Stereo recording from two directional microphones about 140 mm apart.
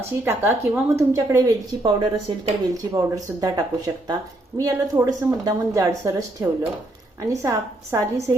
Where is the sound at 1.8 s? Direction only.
35° right (ahead or behind).